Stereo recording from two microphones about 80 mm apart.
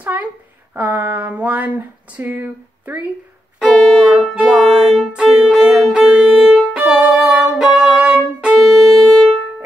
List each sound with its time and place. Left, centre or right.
0.0 s a woman's voice: centre
0.7 s a sound: right
3.5 s music: centre
6.5 s violin: centre
7.5 s music: centre